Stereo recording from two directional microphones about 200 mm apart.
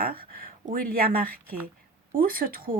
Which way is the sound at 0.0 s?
45° right (ahead or behind).